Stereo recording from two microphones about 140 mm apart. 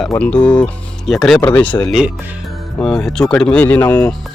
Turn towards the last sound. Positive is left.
turn(degrees=10)  # may be behind; listen again after turning